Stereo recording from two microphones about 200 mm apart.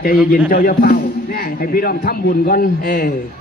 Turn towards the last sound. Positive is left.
turn(degrees=45)  # may be behind; listen again after turning